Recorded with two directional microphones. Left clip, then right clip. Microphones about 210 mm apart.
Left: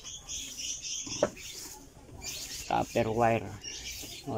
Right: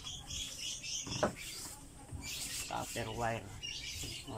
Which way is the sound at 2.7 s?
55° left (ahead or behind).